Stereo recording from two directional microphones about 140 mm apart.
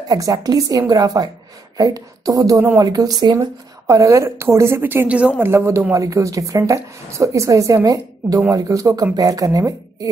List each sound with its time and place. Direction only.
0.1 s speech: 25° right (ahead or behind)